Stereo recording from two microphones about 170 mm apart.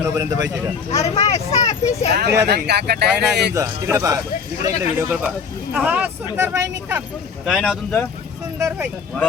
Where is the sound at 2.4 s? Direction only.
75° right (ahead or behind).